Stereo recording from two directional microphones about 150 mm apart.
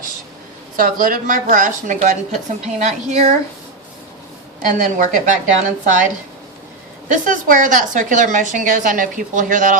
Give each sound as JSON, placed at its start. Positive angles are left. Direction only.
{"t": 0.8, "sound": "a woman's voice", "side_deg": -65}
{"t": 4.7, "sound": "a woman's voice", "side_deg": -60}
{"t": 7.1, "sound": "a woman's voice", "side_deg": -60}